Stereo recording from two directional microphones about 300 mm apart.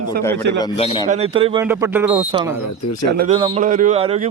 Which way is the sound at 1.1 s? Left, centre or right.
Centre.